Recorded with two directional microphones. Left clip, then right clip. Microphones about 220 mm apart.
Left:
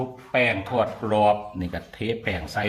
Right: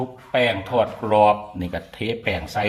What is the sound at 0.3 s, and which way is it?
Speech, 10° right (ahead or behind).